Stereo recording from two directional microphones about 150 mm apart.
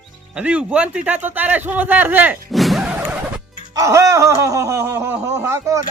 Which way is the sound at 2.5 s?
Centre (ahead or behind).